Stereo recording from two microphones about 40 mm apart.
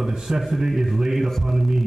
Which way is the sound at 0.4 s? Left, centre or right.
Centre.